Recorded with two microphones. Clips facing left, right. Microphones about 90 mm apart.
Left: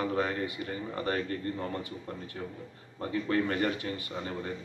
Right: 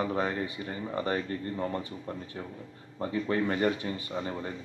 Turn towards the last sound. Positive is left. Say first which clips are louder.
# right 2 dB
turn(degrees=-20)  # may be behind; listen again after turning